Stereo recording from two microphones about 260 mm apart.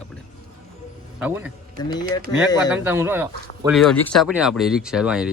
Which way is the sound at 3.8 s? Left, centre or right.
Centre.